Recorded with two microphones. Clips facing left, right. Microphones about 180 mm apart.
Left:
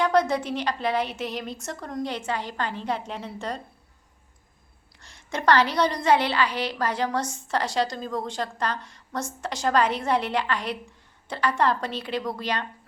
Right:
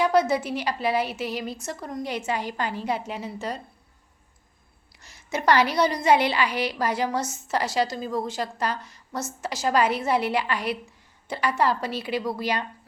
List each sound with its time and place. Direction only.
0.0 s a woman's voice: 5° right (ahead or behind)
4.9 s a woman's voice: 5° right (ahead or behind)